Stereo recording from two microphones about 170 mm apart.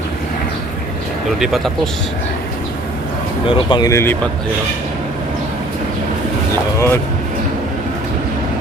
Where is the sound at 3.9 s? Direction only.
15° left (ahead or behind).